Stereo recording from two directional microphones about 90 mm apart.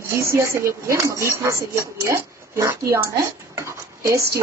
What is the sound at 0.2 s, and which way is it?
Speech, 30° right (ahead or behind).